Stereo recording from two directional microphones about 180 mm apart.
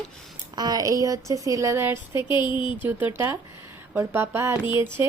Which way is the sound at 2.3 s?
25° left (ahead or behind).